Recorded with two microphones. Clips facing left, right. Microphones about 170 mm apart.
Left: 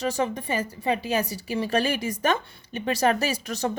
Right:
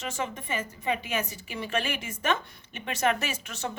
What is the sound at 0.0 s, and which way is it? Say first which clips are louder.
A woman's voice: left 8 dB; 35° left (ahead or behind).